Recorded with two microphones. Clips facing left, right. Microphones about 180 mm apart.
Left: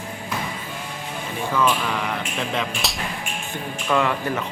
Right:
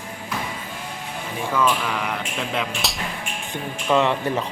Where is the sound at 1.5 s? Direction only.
5° right (ahead or behind).